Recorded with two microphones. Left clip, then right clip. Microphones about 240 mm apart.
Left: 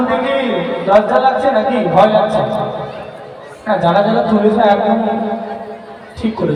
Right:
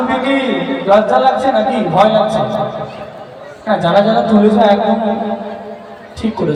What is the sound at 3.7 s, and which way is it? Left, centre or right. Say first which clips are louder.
A man's voice: right 1 dB; right.